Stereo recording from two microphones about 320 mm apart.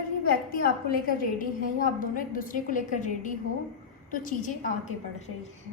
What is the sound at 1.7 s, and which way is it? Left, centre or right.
A woman's voice, left.